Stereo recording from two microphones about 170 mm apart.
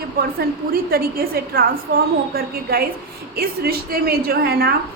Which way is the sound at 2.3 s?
65° right (ahead or behind).